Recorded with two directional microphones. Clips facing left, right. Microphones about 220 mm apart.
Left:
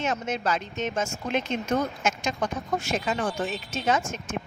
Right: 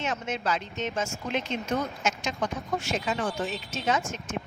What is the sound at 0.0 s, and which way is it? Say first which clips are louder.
Speech: left 3 dB; 45° left (ahead or behind).